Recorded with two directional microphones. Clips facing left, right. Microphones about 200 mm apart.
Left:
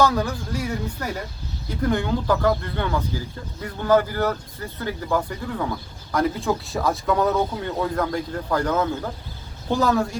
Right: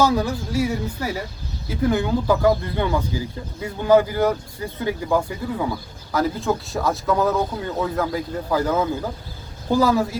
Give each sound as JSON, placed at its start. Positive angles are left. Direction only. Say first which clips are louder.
{"t": 0.0, "sound": "speech", "louder": "right 1 dB", "side_deg": -10}